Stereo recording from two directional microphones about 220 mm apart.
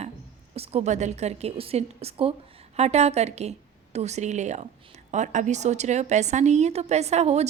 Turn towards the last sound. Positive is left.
turn(degrees=-30)  # may be behind; listen again after turning